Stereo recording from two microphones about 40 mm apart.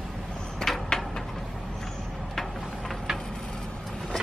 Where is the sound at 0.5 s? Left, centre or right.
Centre.